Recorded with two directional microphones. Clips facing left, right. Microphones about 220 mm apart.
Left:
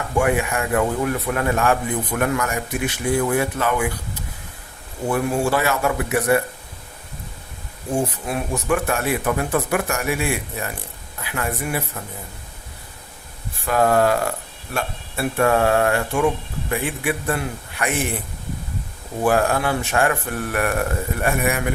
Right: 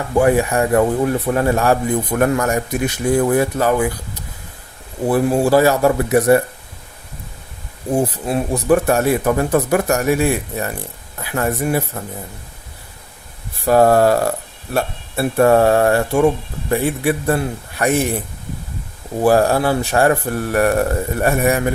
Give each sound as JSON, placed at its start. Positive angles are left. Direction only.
{"t": 0.2, "sound": "a man's voice", "side_deg": -35}
{"t": 8.0, "sound": "a man's voice", "side_deg": -35}
{"t": 13.7, "sound": "a man's voice", "side_deg": -35}
{"t": 19.2, "sound": "a man's voice", "side_deg": -35}